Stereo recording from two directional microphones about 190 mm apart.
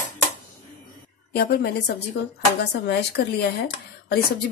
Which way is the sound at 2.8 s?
60° left (ahead or behind).